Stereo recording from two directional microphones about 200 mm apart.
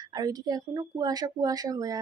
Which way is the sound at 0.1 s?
20° right (ahead or behind).